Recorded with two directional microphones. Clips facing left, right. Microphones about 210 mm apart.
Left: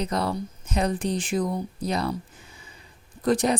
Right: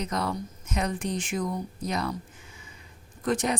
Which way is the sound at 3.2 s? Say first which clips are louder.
Left 5 dB; 35° left (ahead or behind).